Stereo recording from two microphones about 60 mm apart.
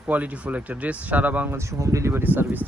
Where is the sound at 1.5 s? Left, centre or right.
Right.